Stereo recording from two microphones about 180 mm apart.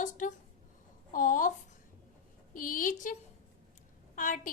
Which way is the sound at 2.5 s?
50° left (ahead or behind).